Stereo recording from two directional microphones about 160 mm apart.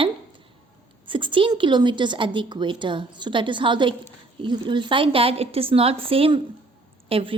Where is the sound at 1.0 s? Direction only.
30° right (ahead or behind).